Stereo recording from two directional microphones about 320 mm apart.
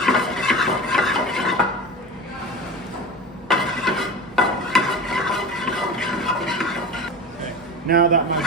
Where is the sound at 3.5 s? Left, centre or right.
Centre.